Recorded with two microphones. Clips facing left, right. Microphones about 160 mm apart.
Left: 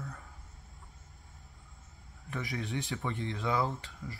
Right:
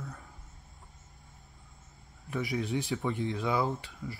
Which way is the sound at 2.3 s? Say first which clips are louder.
Right 5 dB; centre (ahead or behind).